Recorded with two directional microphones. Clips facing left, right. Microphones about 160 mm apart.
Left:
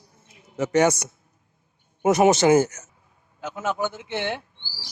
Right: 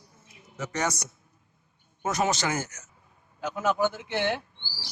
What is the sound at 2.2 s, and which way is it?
Speech, 20° left (ahead or behind).